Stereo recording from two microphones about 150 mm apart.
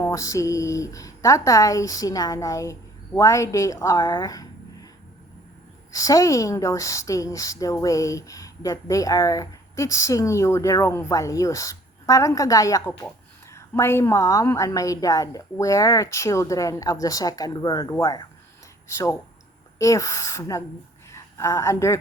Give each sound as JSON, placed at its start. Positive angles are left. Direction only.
{"t": 0.0, "sound": "speech", "side_deg": 20}
{"t": 5.9, "sound": "a woman's voice", "side_deg": 20}